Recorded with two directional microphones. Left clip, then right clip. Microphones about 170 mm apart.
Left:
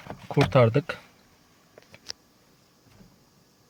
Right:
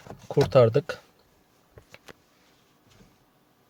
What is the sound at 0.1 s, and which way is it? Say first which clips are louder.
Speech: right 2 dB; 5° right (ahead or behind).